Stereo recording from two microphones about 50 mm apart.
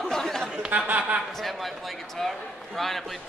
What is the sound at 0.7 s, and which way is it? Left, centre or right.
Chuckle, right.